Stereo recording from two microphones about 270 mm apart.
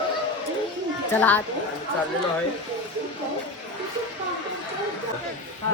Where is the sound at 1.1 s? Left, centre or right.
Centre.